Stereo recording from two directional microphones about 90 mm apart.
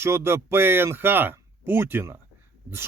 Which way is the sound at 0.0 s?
30° right (ahead or behind).